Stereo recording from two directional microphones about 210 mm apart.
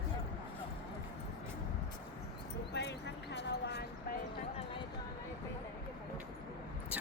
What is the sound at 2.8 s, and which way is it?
Basketball bounce, 55° left (ahead or behind).